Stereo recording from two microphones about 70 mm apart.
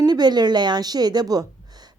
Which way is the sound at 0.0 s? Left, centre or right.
Right.